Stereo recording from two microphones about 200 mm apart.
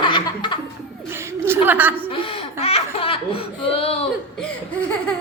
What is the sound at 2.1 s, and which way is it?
Laughter, 30° left (ahead or behind).